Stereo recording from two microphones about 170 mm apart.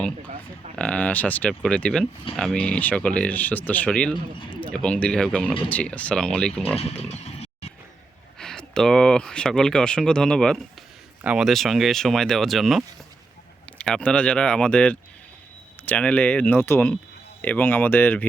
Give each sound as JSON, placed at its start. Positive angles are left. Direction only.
{"t": 0.8, "sound": "speech", "side_deg": 5}
{"t": 7.1, "sound": "a sound", "side_deg": 40}
{"t": 8.4, "sound": "speech", "side_deg": 5}